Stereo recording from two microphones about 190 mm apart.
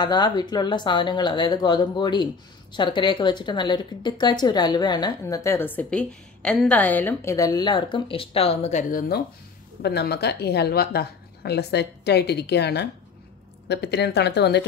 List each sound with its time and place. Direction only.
0.0 s a woman's voice: 20° left (ahead or behind); by 9.0 s 35° left (ahead or behind)
9.8 s a woman's voice: 60° left (ahead or behind)